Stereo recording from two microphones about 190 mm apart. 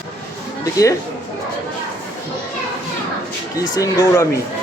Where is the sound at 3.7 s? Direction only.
20° left (ahead or behind).